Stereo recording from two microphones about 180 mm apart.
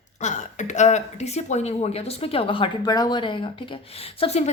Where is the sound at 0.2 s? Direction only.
40° left (ahead or behind).